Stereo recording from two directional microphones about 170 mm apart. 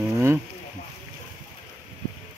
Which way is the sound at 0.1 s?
15° right (ahead or behind).